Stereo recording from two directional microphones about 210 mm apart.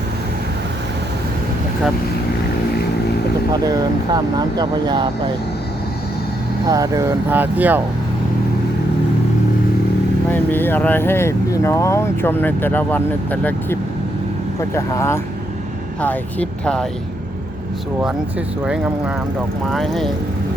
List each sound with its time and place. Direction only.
3.7 s speech: 20° right (ahead or behind)
6.7 s speech: 15° right (ahead or behind)
10.2 s speech: 10° left (ahead or behind)
18.0 s speech: 5° right (ahead or behind)